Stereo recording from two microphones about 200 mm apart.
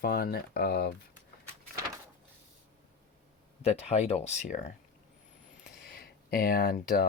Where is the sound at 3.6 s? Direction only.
30° left (ahead or behind).